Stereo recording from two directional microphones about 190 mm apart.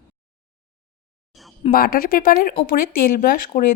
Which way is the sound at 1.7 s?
50° left (ahead or behind).